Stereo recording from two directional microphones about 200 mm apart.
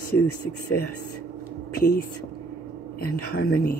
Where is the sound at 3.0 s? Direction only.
50° left (ahead or behind).